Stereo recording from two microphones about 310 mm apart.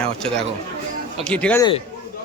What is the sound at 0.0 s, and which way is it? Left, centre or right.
Speech, centre.